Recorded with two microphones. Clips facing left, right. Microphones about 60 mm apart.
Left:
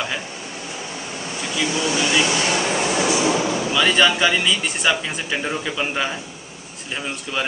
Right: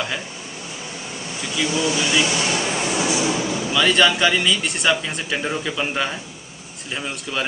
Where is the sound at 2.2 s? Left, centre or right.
Left.